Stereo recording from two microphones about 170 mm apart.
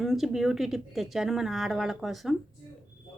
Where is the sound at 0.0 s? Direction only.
Centre (ahead or behind).